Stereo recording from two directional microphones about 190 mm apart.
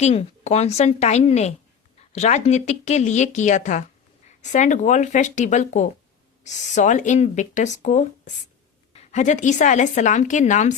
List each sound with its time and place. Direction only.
0.0 s speech: 35° left (ahead or behind)